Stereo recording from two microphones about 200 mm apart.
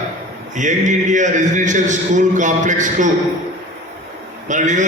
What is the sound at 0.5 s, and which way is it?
A man's voice, 40° right (ahead or behind).